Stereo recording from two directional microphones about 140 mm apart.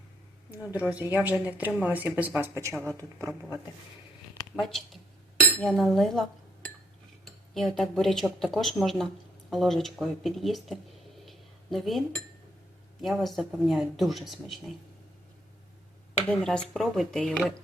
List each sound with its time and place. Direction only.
0.6 s a woman's voice: 20° left (ahead or behind)
0.9 s speech: 10° right (ahead or behind)
2.7 s a woman's voice: 10° left (ahead or behind)
4.5 s speech: centre (ahead or behind)
7.3 s speech: centre (ahead or behind)
11.3 s a sound: centre (ahead or behind)
13.0 s speech: centre (ahead or behind)
16.2 s speech: 10° left (ahead or behind)